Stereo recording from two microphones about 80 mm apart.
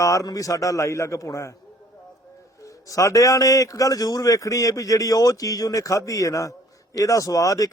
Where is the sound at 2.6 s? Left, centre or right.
Left.